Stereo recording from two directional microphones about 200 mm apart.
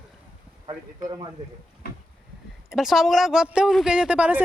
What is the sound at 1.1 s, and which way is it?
Speech, 25° right (ahead or behind).